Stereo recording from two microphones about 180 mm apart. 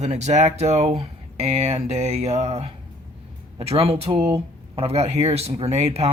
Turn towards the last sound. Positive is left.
turn(degrees=-35)  # may be behind; listen again after turning